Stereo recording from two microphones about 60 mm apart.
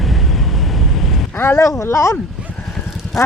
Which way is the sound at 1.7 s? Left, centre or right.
Left.